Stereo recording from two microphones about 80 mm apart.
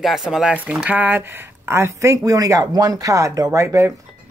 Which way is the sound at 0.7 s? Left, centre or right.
Right.